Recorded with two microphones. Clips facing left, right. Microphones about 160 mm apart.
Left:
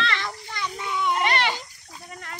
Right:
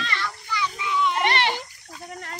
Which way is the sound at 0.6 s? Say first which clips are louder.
Right 3 dB; 50° left (ahead or behind).